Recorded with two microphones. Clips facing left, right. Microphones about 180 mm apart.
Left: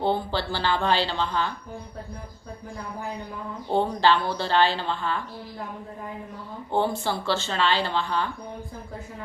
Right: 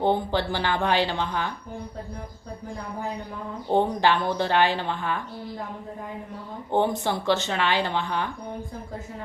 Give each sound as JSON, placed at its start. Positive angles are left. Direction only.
{"t": 0.0, "sound": "speech", "side_deg": -15}
{"t": 3.7, "sound": "speech", "side_deg": -15}
{"t": 6.7, "sound": "speech", "side_deg": -20}